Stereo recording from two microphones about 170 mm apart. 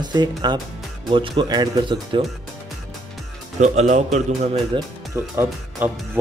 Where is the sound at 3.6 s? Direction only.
40° right (ahead or behind).